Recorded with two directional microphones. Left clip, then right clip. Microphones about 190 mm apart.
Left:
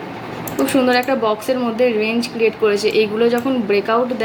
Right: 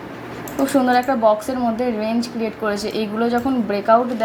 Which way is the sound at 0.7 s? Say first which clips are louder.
Left 1 dB; 25° right (ahead or behind).